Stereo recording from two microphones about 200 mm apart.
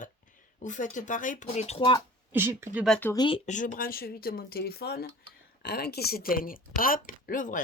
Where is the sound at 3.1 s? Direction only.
25° left (ahead or behind).